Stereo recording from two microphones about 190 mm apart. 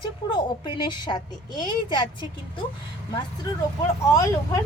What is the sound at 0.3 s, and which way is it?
A woman's voice, 25° left (ahead or behind).